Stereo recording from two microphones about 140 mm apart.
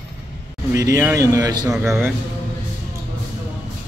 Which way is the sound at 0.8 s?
25° right (ahead or behind).